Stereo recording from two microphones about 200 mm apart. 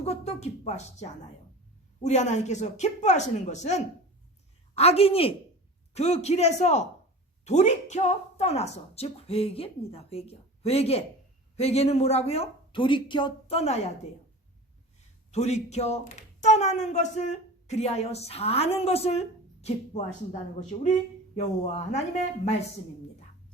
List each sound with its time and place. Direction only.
0.0 s a woman's voice: 30° left (ahead or behind)
15.3 s speech: 35° left (ahead or behind)